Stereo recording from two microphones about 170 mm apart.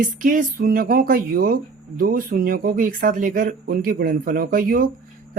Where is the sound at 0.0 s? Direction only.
50° right (ahead or behind).